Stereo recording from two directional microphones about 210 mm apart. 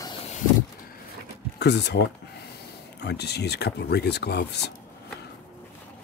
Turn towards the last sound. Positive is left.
turn(degrees=50)  # may be behind; listen again after turning